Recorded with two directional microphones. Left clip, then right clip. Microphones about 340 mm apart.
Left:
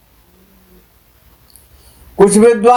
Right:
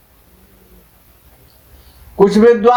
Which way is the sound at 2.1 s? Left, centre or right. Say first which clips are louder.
Left 1 dB; centre.